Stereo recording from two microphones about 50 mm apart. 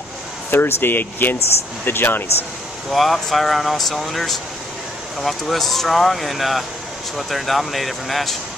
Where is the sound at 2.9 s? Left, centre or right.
Centre.